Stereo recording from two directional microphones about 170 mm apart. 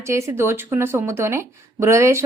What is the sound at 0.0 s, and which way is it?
A woman's voice, 15° right (ahead or behind).